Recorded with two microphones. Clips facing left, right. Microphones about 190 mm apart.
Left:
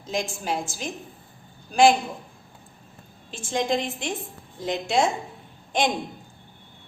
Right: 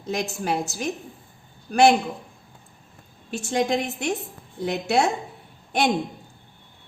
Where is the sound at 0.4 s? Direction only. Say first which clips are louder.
Right 3 dB; 60° right (ahead or behind).